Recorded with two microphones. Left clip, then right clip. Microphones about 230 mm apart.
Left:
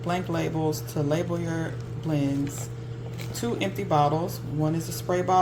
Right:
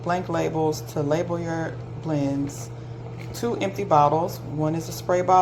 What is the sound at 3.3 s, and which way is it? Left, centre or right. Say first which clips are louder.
Speech: right 3 dB; left.